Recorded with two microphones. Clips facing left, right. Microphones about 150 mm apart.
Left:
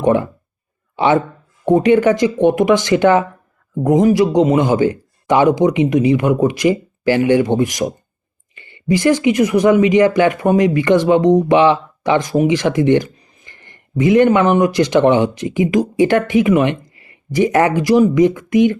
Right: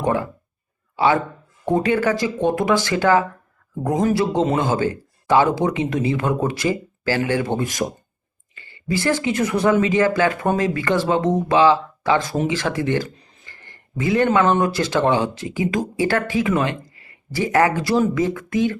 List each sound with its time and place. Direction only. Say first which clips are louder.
0.0 s speech: left 7 dB; 20° left (ahead or behind)